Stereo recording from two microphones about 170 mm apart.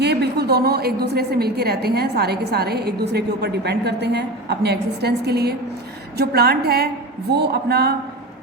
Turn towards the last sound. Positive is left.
turn(degrees=-70)  # may be behind; listen again after turning